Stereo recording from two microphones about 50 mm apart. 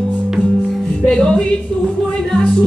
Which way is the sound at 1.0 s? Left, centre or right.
Centre.